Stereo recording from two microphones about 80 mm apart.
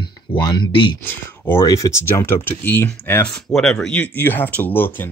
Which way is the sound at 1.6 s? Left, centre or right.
Left.